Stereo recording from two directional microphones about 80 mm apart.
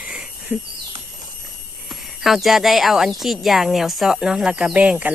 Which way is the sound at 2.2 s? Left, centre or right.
Centre.